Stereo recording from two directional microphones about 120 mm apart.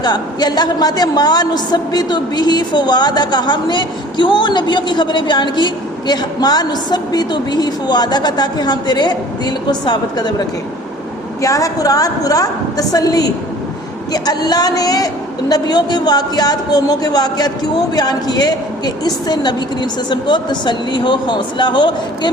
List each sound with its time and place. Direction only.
0.0 s a woman's voice: 35° left (ahead or behind)
11.4 s a woman's voice: 30° left (ahead or behind)